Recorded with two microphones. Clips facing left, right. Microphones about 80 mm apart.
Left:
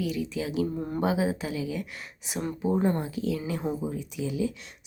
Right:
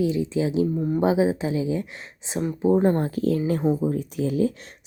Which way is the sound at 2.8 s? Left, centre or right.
Right.